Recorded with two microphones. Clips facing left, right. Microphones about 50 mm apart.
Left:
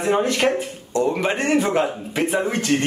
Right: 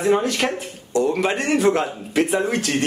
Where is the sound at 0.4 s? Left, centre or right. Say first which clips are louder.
Left 4 dB; centre.